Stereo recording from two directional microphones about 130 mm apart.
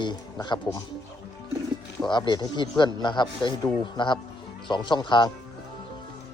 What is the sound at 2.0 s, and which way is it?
Speech, 35° left (ahead or behind).